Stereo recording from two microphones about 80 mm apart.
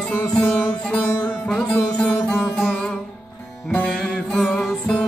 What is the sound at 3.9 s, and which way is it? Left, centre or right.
Music, centre.